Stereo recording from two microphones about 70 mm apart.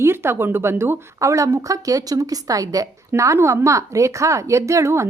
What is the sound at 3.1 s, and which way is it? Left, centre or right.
A woman's voice, right.